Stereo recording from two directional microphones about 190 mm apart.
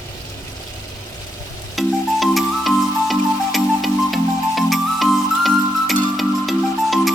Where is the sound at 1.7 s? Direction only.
Centre (ahead or behind).